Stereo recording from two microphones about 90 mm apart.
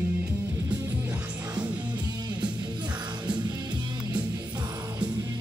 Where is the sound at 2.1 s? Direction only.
50° right (ahead or behind).